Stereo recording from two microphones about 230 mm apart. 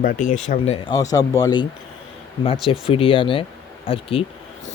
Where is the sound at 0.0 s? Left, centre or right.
Left.